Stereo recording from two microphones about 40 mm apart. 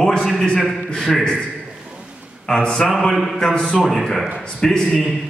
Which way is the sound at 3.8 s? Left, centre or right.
Centre.